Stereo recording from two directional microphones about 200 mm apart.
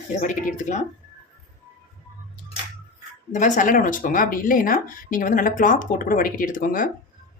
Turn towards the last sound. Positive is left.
turn(degrees=45)  # may be behind; listen again after turning